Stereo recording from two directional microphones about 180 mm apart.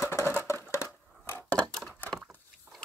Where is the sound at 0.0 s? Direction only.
15° left (ahead or behind).